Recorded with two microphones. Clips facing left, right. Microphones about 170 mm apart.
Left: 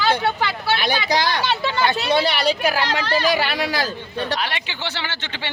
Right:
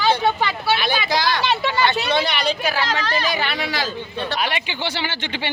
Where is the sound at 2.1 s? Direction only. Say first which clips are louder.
Left 2 dB; 10° left (ahead or behind).